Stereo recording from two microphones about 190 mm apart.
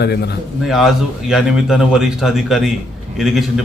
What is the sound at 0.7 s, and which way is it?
A man's voice, centre (ahead or behind).